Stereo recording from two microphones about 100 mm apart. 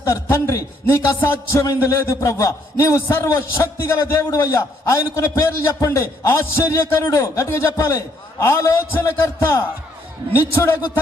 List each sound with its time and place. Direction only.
0.0 s a man's voice: 30° left (ahead or behind)